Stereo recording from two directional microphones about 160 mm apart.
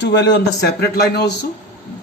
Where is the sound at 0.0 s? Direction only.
90° left.